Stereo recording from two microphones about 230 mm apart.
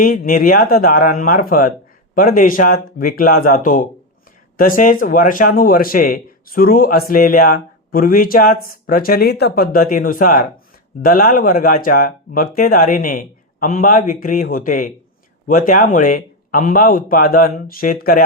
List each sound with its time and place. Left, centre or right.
0.0 s speech: left